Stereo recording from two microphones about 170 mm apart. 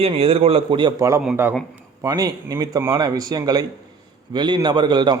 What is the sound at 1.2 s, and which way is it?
Speech, 5° right (ahead or behind).